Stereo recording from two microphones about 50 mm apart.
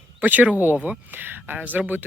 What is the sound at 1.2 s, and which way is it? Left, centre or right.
Speech, right.